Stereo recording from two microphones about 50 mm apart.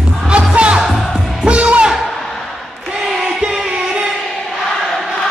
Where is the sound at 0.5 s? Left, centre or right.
Right.